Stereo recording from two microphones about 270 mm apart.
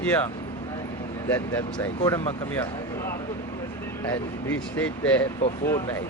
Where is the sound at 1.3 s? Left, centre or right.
Centre.